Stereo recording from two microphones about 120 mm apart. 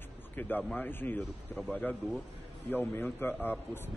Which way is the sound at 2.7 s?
15° left (ahead or behind).